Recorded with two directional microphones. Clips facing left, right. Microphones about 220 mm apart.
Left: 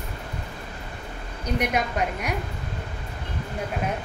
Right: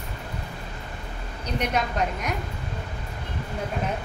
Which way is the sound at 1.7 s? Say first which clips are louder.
Even; 10° left (ahead or behind).